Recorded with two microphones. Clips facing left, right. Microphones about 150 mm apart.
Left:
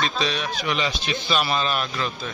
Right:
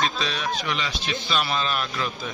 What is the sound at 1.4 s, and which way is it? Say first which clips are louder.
Speech: left 1 dB; 5° left (ahead or behind).